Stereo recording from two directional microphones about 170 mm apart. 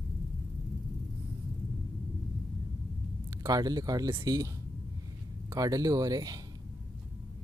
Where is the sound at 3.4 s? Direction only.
20° right (ahead or behind).